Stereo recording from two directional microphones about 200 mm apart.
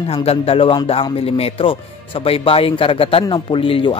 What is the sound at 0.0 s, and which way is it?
Speech, 30° left (ahead or behind).